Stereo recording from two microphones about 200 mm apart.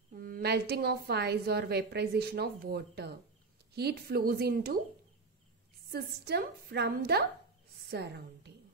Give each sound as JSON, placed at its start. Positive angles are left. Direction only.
{"t": 0.1, "sound": "a woman's voice", "side_deg": -45}
{"t": 5.9, "sound": "a woman's voice", "side_deg": -50}